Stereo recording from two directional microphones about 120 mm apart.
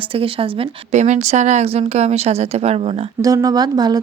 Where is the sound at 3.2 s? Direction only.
30° right (ahead or behind).